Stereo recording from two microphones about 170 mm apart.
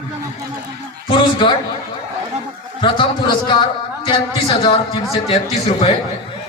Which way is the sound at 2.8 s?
25° left (ahead or behind).